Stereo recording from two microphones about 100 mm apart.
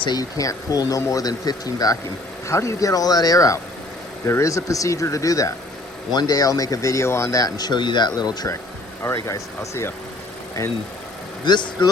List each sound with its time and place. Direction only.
0.0 s speech: 40° left (ahead or behind)
9.0 s speech: 30° left (ahead or behind)
11.4 s speech: 45° left (ahead or behind)